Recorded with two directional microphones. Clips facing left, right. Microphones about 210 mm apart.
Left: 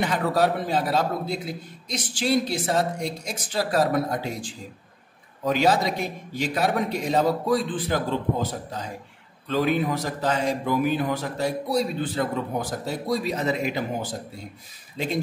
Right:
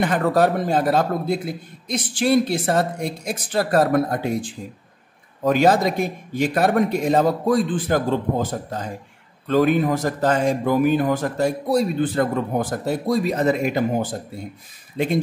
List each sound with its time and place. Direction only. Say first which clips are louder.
0.0 s speech: right 4 dB; 50° right (ahead or behind)